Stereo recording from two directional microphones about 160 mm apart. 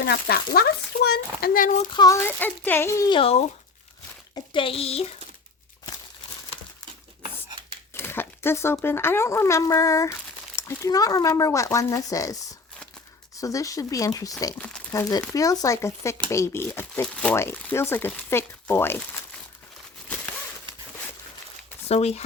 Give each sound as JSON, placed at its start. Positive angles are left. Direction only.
{"t": 0.0, "sound": "speech", "side_deg": 75}
{"t": 1.9, "sound": "speech", "side_deg": 25}
{"t": 2.2, "sound": "speech", "side_deg": 15}
{"t": 3.1, "sound": "speech", "side_deg": 35}
{"t": 7.9, "sound": "speech", "side_deg": 15}
{"t": 14.6, "sound": "speech", "side_deg": 10}
{"t": 15.3, "sound": "speech", "side_deg": 20}
{"t": 21.8, "sound": "speech", "side_deg": 40}